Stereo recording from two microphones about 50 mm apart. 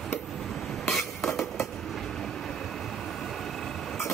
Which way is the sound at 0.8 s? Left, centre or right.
Centre.